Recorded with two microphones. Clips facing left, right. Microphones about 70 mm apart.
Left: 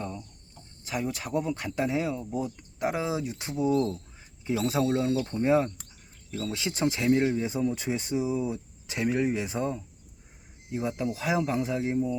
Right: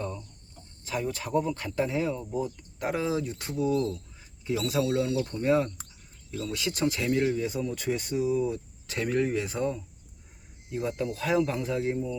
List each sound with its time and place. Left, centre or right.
0.9 s speech: centre
3.7 s speech: left